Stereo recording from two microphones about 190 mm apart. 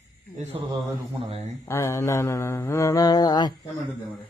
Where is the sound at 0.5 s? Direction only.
30° right (ahead or behind).